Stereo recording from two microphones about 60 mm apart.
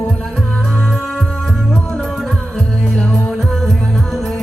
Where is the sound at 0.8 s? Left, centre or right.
Centre.